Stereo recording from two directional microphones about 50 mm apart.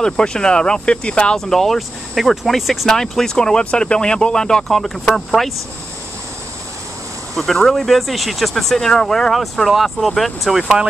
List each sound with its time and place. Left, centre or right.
0.0 s speech: centre
1.4 s speech: centre
2.9 s speech: centre
7.6 s speech: centre